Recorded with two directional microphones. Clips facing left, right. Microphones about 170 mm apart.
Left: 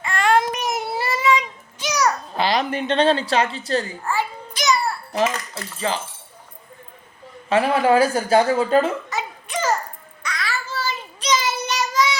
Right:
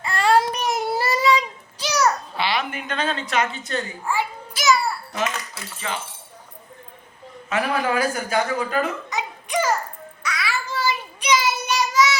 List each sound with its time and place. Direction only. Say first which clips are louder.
0.0 s a sound: even; 35° right (ahead or behind)
2.3 s a woman's voice: left 4 dB; 40° left (ahead or behind)
4.0 s a sound: left 1 dB; 10° right (ahead or behind)
4.6 s babbling: right 1 dB; centre (ahead or behind)
5.8 s speech: left 6 dB; 35° left (ahead or behind)
7.5 s speech: left 6 dB; 30° left (ahead or behind)
9.0 s babbling: even; 15° right (ahead or behind)
10.2 s child singing: right 1 dB; 10° right (ahead or behind)